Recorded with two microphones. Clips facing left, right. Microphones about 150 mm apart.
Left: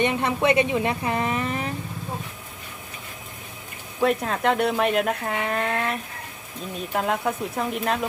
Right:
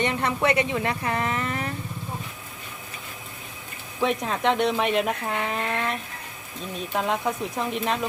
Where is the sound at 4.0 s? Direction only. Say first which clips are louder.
Left 2 dB; centre (ahead or behind).